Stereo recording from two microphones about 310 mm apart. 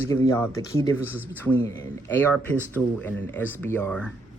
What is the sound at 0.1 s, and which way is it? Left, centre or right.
Speech, centre.